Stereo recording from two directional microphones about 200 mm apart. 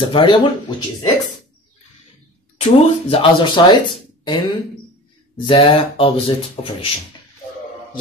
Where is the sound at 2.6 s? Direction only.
30° left (ahead or behind).